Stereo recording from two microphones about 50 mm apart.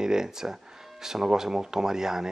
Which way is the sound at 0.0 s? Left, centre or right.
Centre.